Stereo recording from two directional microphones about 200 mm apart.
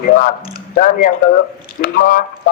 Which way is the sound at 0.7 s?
45° left (ahead or behind).